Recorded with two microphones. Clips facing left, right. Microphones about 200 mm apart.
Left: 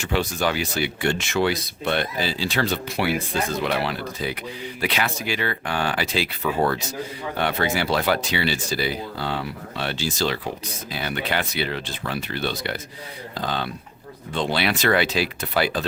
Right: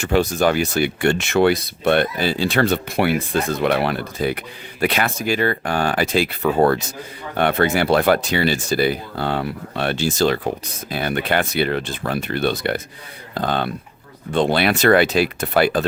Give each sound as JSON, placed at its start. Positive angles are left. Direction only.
{"t": 0.0, "sound": "speech", "side_deg": -45}